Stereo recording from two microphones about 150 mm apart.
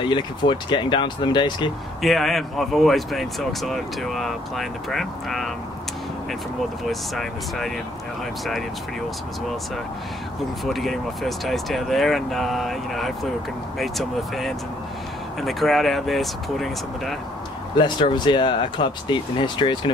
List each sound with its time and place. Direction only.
0.0 s speech: 30° left (ahead or behind)
2.0 s speech: centre (ahead or behind)
6.8 s speech: centre (ahead or behind)
10.6 s speech: centre (ahead or behind)
17.7 s speech: 30° left (ahead or behind)